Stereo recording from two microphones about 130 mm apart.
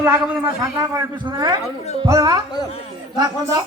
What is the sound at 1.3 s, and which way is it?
Music, 35° right (ahead or behind).